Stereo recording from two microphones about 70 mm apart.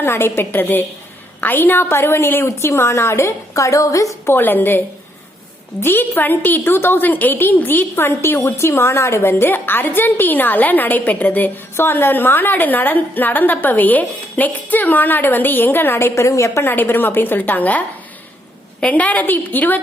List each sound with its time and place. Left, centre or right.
0.0 s a woman's voice: left
4.3 s a woman's voice: left
5.8 s a woman's voice: left
16.6 s a woman's voice: left